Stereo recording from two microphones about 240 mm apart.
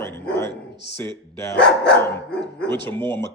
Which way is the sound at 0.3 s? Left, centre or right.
Centre.